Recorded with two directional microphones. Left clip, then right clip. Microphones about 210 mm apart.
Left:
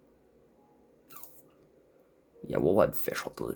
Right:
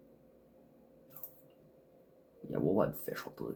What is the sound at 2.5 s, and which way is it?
Speech, 50° left (ahead or behind).